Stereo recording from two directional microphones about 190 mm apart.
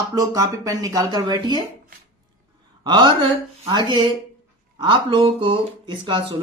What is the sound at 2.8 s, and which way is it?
A woman's voice, 25° right (ahead or behind).